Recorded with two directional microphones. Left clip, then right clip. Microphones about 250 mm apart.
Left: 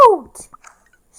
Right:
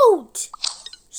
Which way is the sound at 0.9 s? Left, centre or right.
Right.